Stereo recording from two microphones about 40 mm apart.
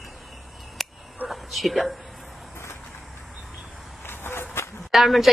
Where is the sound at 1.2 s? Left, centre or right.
Centre.